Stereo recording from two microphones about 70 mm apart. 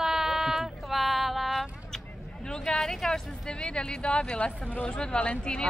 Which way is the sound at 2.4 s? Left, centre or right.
Centre.